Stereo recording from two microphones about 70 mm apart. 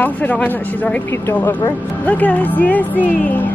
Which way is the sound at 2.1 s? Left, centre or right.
Left.